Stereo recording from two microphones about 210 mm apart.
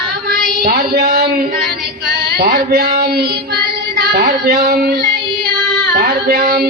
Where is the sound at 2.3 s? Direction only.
50° right (ahead or behind).